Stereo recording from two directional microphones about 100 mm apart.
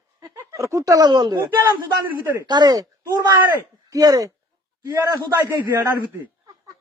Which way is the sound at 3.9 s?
35° right (ahead or behind).